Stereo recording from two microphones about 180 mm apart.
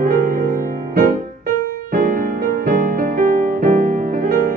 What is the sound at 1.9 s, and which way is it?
Music, 50° right (ahead or behind).